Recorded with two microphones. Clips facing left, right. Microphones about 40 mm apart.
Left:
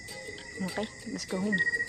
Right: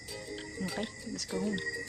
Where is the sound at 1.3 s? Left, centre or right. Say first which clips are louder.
Left 2 dB; left.